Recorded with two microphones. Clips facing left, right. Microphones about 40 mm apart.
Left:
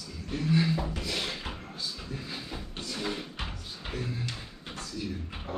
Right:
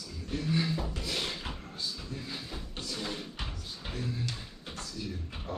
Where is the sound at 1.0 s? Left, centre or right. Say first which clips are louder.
Left 1 dB; centre.